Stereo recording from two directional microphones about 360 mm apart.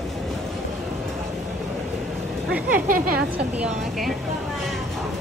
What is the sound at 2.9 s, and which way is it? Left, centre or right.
Speech, right.